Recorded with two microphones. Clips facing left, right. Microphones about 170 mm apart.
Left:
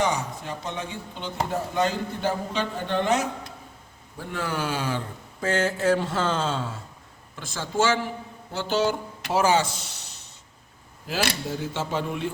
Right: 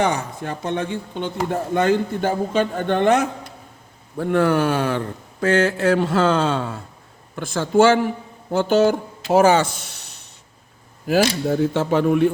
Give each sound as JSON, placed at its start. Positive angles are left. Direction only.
{"t": 0.0, "sound": "speech", "side_deg": -60}